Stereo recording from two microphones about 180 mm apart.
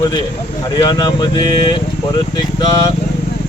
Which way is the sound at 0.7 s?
25° left (ahead or behind).